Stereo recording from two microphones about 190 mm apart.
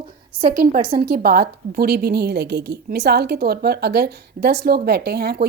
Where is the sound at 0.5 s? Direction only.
55° right (ahead or behind).